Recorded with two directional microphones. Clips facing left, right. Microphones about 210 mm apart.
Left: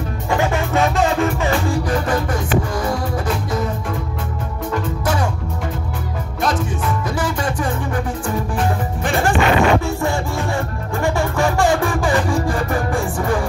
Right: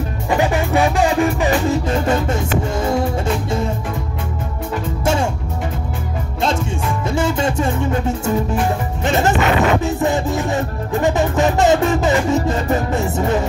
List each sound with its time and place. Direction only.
0.4 s music: 15° right (ahead or behind)
7.1 s music: 25° right (ahead or behind)
9.0 s music: 20° right (ahead or behind)